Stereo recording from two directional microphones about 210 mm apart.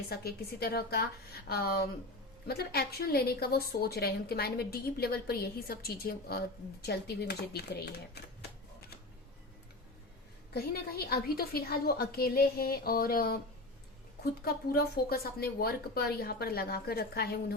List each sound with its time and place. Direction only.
0.1 s a woman's voice: 50° left (ahead or behind)
10.5 s a woman's voice: 45° left (ahead or behind)
14.4 s a woman's voice: 45° left (ahead or behind)